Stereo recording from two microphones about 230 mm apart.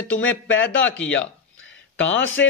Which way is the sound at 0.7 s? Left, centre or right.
Centre.